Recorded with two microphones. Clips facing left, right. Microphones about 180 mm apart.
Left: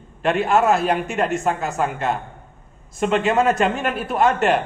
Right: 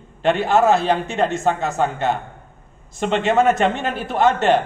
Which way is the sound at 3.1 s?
30° right (ahead or behind).